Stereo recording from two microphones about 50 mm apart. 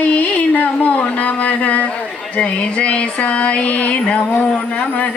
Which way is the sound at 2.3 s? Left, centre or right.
Left.